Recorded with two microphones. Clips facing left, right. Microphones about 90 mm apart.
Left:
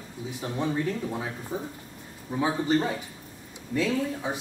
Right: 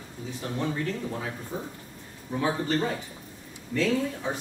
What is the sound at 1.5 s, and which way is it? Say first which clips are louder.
Speech: left 2 dB; 15° left (ahead or behind).